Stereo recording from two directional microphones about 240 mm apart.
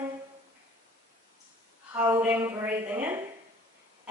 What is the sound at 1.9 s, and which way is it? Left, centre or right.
Speech, centre.